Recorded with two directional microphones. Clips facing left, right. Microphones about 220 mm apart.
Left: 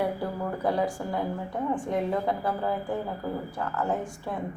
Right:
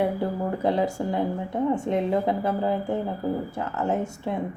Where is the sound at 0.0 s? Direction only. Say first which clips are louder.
Right 4 dB; 25° right (ahead or behind).